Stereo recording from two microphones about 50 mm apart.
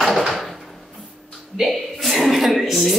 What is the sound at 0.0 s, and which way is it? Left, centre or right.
Door, centre.